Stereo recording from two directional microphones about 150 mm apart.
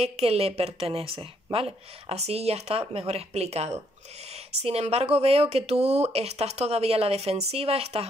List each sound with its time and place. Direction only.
0.0 s a woman's voice: 45° right (ahead or behind)